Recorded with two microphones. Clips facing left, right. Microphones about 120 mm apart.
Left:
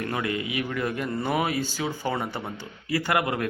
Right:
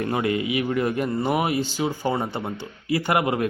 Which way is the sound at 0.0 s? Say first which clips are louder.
Right 5 dB; 25° right (ahead or behind).